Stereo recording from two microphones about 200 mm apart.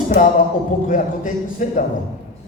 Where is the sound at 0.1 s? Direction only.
40° left (ahead or behind).